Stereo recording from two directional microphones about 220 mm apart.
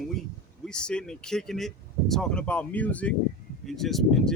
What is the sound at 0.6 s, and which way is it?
Speech, 5° left (ahead or behind).